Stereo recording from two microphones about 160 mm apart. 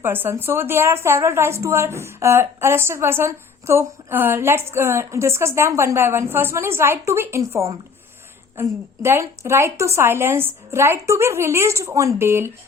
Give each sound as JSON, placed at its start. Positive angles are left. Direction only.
{"t": 0.0, "sound": "a woman's voice", "side_deg": -15}